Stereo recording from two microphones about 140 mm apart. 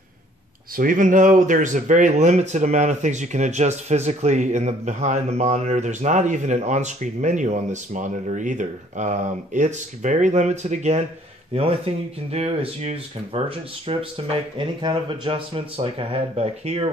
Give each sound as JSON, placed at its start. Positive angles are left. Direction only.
{"t": 0.7, "sound": "speech", "side_deg": -75}